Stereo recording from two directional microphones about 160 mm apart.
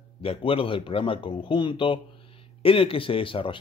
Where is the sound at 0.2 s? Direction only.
35° left (ahead or behind).